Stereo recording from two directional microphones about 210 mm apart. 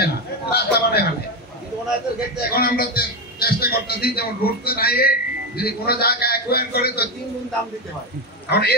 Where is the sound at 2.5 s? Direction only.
45° left (ahead or behind).